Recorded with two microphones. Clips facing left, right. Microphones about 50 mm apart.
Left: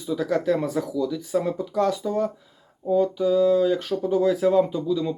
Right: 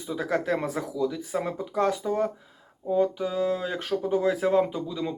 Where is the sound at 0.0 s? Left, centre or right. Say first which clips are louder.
Left 4 dB; right.